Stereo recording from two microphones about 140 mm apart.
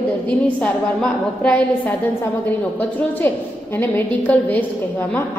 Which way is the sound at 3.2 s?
15° left (ahead or behind).